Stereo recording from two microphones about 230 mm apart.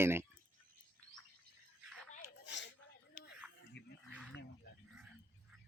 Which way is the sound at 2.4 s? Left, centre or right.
Left.